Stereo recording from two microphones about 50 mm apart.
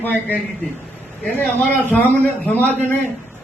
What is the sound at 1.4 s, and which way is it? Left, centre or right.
A man's voice, left.